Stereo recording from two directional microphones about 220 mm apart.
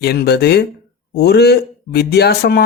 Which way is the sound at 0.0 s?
50° left (ahead or behind).